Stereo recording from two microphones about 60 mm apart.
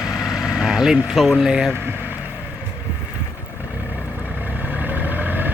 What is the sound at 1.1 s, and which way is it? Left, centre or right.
Speech, centre.